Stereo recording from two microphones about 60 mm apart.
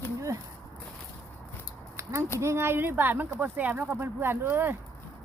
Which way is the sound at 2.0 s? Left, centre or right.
Right.